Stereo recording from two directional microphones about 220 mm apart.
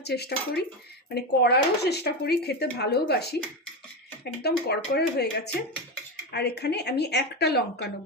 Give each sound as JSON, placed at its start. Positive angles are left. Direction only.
{"t": 0.0, "sound": "speech", "side_deg": 45}